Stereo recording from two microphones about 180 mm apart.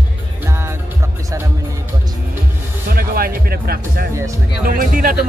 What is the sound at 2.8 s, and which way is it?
Speech, 55° right (ahead or behind).